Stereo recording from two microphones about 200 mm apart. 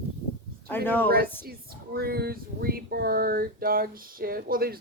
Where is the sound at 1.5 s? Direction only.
50° right (ahead or behind).